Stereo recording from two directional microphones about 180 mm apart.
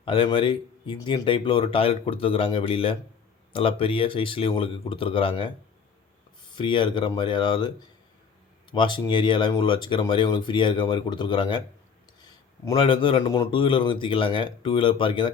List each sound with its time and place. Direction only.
0.0 s speech: 30° left (ahead or behind)
8.7 s speech: 25° left (ahead or behind)
12.7 s speech: 30° left (ahead or behind)